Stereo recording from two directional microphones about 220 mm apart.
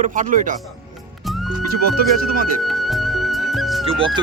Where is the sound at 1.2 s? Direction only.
Centre (ahead or behind).